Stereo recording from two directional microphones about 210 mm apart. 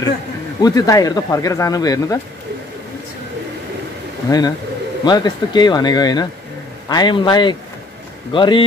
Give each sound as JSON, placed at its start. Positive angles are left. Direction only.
{"t": 0.6, "sound": "speech", "side_deg": 15}
{"t": 4.3, "sound": "speech", "side_deg": 20}